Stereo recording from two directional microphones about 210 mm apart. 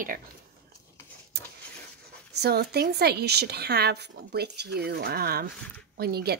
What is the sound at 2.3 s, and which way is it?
A woman's voice, 50° right (ahead or behind).